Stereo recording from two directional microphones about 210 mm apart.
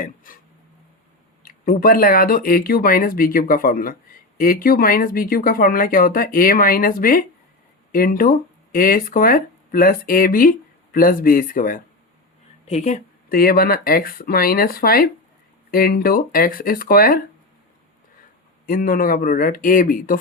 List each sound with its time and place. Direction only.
0.3 s speech: 40° left (ahead or behind)
1.5 s speech: 40° left (ahead or behind)
13.3 s speech: 45° left (ahead or behind)
18.6 s speech: 40° left (ahead or behind)